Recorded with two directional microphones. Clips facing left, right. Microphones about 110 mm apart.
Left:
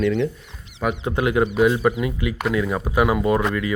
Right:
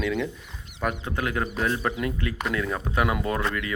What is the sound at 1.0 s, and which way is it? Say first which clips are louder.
Speech: left 8 dB; 20° left (ahead or behind).